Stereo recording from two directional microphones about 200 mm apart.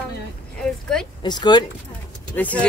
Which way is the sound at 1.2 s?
20° left (ahead or behind).